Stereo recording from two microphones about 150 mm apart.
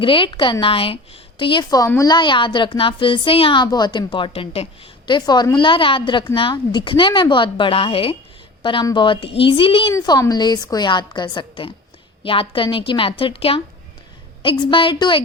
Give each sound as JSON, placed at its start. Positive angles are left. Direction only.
{"t": 0.0, "sound": "a woman's voice", "side_deg": 35}
{"t": 9.9, "sound": "a woman's voice", "side_deg": 25}